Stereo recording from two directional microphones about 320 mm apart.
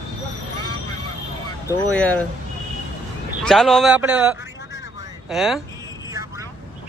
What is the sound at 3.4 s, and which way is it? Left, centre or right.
Speech, centre.